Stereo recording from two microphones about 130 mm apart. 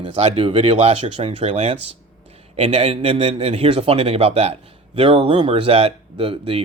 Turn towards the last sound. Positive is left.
turn(degrees=-45)  # may be behind; listen again after turning